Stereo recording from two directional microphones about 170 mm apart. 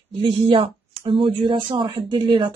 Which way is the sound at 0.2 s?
30° right (ahead or behind).